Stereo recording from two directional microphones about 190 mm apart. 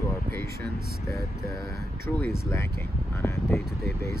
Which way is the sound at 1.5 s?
15° left (ahead or behind).